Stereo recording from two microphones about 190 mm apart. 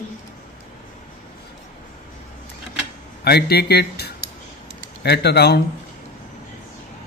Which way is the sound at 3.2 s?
55° left (ahead or behind).